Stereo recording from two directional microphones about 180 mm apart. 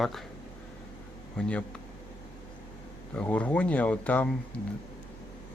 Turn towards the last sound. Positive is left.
turn(degrees=10)  # may be behind; listen again after turning